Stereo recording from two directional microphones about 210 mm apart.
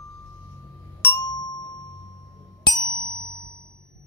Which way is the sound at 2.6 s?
20° left (ahead or behind).